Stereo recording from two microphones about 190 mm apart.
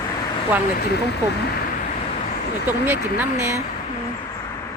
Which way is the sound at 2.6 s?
10° right (ahead or behind).